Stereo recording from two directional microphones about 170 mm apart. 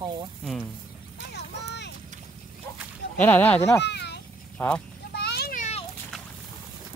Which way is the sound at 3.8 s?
85° left.